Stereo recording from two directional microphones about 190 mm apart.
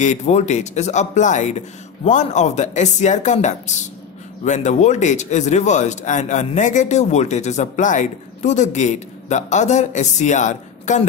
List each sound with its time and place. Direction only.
0.0 s speech: 40° left (ahead or behind)